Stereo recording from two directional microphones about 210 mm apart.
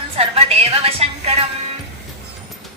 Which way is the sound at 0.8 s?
30° right (ahead or behind).